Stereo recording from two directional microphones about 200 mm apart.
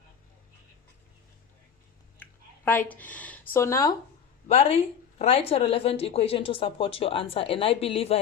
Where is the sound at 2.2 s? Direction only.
10° left (ahead or behind).